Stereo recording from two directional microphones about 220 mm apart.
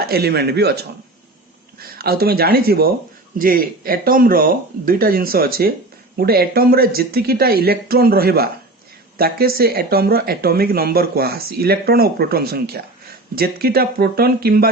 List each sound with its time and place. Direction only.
0.1 s speech: 45° right (ahead or behind)